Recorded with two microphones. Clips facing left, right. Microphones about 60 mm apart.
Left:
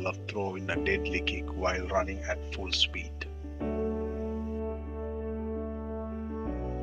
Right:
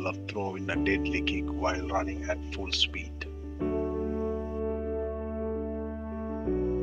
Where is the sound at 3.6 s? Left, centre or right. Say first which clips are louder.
Right 3 dB; centre.